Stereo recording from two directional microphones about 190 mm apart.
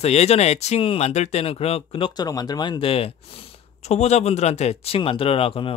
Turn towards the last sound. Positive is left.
turn(degrees=30)  # may be behind; listen again after turning